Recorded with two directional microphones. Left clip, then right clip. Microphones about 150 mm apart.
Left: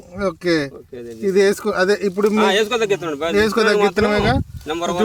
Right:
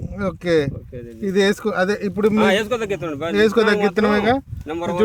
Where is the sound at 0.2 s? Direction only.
45° right (ahead or behind).